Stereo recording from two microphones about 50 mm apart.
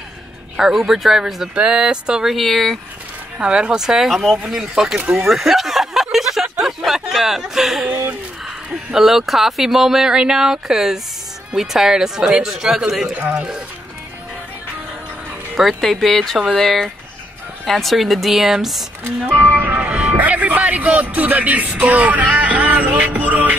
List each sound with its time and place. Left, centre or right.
0.6 s speech: centre
1.5 s speech: centre
2.2 s speech: centre
3.3 s speech: right
5.2 s a sound: centre
8.9 s speech: centre
13.1 s speech: right
15.8 s speech: centre
19.3 s music: right
19.9 s speech: right